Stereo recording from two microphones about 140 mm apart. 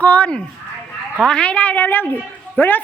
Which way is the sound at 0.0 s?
10° left (ahead or behind).